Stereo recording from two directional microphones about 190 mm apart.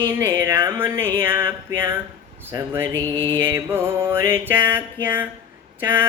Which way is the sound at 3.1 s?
25° right (ahead or behind).